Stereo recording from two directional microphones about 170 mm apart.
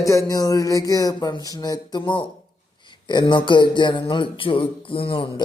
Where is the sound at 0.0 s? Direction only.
20° left (ahead or behind).